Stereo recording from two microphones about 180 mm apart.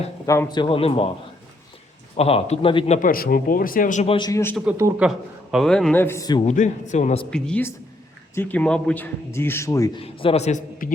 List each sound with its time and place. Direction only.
0.3 s a man's voice: 20° left (ahead or behind)
2.1 s a man's voice: 35° left (ahead or behind)
3.1 s speech: 55° left (ahead or behind)
4.2 s a man's voice: 15° left (ahead or behind)
4.8 s speech: 15° right (ahead or behind)
5.0 s a man's voice: 5° right (ahead or behind); by 6.4 s 20° left (ahead or behind)
6.4 s a man's voice: 40° left (ahead or behind)
7.3 s a woman's voice: 5° left (ahead or behind)
10.0 s a man's voice: 30° left (ahead or behind)